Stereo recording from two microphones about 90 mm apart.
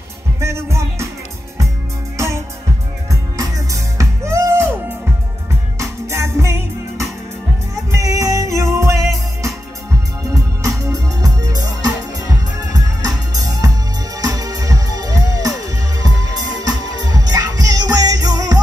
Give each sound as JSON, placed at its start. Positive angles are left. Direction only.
{"t": 0.4, "sound": "music", "side_deg": -30}
{"t": 2.1, "sound": "music", "side_deg": -30}